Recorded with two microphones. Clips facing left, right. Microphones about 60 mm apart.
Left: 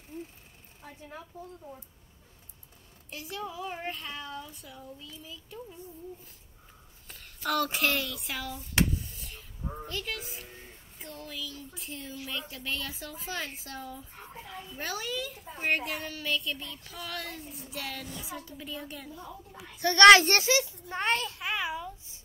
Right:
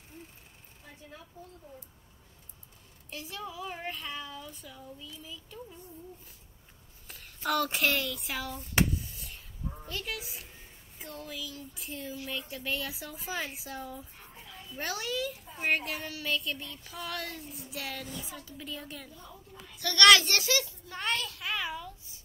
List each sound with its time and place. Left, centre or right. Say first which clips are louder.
3.1 s a woman's voice: left 2 dB; centre
7.4 s a woman's voice: even; centre
8.7 s a sound: even; centre
9.8 s a woman's voice: even; centre
18.2 s a woman's voice: left 3 dB; centre
19.8 s a child's voice: left 5 dB; left